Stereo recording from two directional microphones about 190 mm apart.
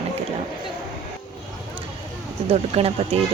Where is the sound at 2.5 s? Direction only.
30° right (ahead or behind).